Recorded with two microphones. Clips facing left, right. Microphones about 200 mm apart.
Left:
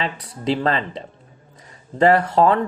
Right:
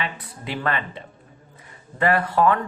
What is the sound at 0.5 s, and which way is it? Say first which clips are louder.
A man's voice: left 5 dB; 30° left (ahead or behind).